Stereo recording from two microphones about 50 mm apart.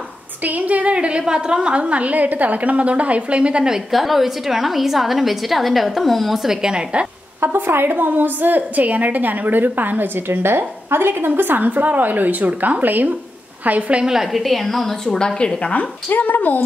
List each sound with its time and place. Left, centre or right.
0.4 s a woman's voice: right; by 3.8 s centre
3.9 s a woman's voice: centre
7.3 s a woman's voice: right
14.0 s a woman's voice: centre
15.1 s a woman's voice: centre; by 16.6 s left